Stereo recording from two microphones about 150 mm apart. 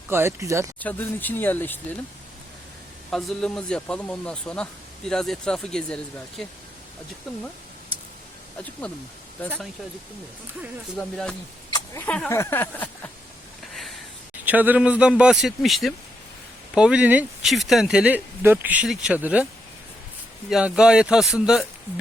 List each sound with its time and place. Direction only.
0.1 s speech: 15° right (ahead or behind)
0.8 s speech: 10° left (ahead or behind)
3.1 s speech: 5° left (ahead or behind)
10.9 s speech: 5° left (ahead or behind)
14.4 s speech: 10° right (ahead or behind)
20.5 s speech: 5° right (ahead or behind)